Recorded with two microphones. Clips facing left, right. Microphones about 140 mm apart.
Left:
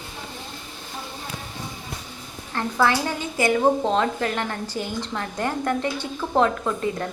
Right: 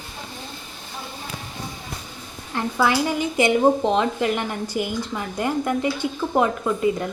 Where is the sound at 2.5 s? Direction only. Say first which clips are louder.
Even; 15° right (ahead or behind).